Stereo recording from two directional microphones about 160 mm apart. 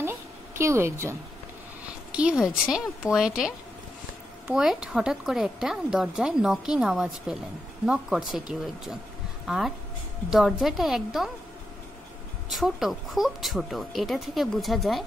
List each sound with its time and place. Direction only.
0.0 s a sound: 15° right (ahead or behind)
2.1 s speech: 5° right (ahead or behind)
12.4 s speech: centre (ahead or behind)